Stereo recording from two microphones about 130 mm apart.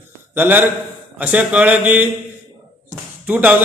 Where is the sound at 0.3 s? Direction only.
15° right (ahead or behind).